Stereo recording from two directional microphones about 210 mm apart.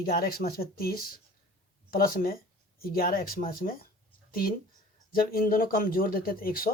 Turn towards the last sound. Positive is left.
turn(degrees=45)  # may be behind; listen again after turning